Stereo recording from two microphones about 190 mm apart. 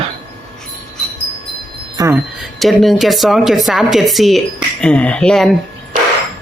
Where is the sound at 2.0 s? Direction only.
15° right (ahead or behind).